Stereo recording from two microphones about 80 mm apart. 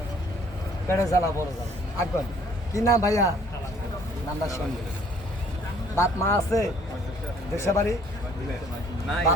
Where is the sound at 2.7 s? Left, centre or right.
Left.